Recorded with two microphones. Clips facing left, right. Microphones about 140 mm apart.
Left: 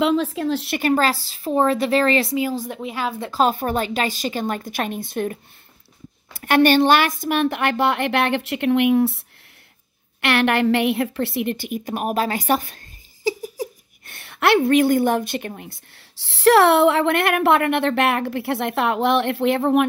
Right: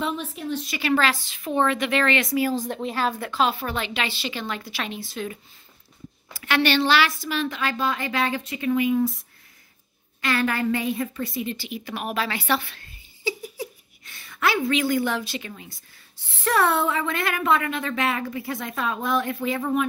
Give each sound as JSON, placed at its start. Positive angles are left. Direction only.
{"t": 0.0, "sound": "a woman's voice", "side_deg": 90}
{"t": 0.7, "sound": "a woman's voice", "side_deg": 45}
{"t": 2.7, "sound": "a woman's voice", "side_deg": 10}
{"t": 3.2, "sound": "a woman's voice", "side_deg": 35}
{"t": 10.2, "sound": "a woman's voice", "side_deg": 75}
{"t": 13.6, "sound": "giggle", "side_deg": 40}
{"t": 14.0, "sound": "a woman's voice", "side_deg": 65}